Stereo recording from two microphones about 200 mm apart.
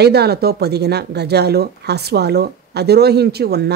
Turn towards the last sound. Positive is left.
turn(degrees=-55)  # may be behind; listen again after turning